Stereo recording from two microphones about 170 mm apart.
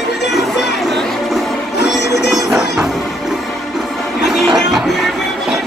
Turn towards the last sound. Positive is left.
turn(degrees=0)  # may be behind; listen again after turning